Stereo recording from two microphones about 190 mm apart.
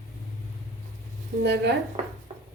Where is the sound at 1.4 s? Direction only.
65° right (ahead or behind).